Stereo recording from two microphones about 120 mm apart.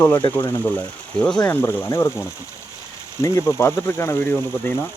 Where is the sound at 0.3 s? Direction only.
15° left (ahead or behind).